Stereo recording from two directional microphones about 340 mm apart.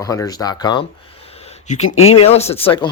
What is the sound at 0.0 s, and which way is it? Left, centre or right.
Speech, centre.